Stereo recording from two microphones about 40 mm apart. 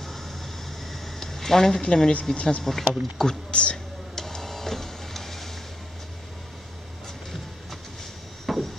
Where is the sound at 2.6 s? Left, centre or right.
Centre.